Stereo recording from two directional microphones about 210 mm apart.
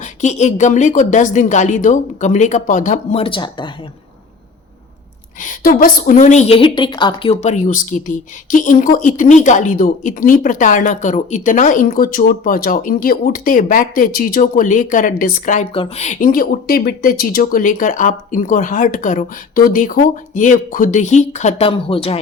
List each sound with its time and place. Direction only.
0.0 s a woman's voice: 35° left (ahead or behind)
5.4 s a woman's voice: 40° left (ahead or behind)
15.7 s a woman's voice: 30° left (ahead or behind)